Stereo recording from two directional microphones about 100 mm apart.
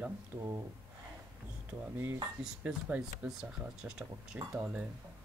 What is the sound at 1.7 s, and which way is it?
Speech, 20° right (ahead or behind).